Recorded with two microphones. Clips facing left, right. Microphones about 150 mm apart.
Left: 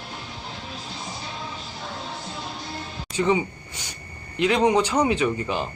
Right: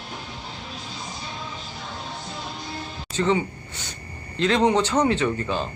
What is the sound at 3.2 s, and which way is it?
Speech, 15° left (ahead or behind).